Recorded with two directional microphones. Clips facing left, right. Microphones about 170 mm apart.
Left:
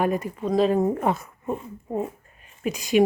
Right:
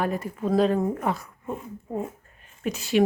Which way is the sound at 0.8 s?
25° left (ahead or behind).